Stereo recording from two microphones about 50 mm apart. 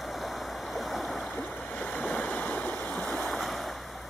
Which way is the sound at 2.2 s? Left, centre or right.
Left.